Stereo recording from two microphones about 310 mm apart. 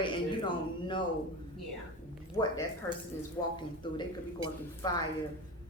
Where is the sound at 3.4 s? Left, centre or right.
Centre.